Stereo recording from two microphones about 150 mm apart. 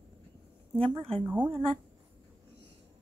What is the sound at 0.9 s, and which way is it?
Speech, 40° right (ahead or behind).